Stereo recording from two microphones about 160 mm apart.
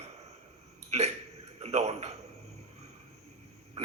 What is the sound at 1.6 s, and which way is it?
Speech, 40° right (ahead or behind).